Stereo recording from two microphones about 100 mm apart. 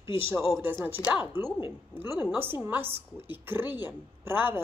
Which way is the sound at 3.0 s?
20° right (ahead or behind).